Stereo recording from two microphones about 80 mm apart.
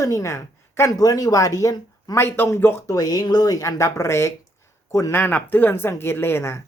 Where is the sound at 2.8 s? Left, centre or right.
Left.